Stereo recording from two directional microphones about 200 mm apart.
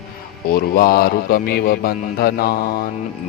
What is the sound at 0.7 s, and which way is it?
Speech, 45° left (ahead or behind).